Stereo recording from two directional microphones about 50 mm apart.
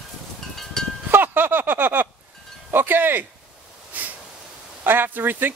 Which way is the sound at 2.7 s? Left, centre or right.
Right.